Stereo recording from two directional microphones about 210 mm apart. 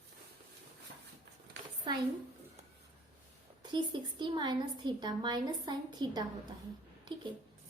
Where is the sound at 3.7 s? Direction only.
20° right (ahead or behind).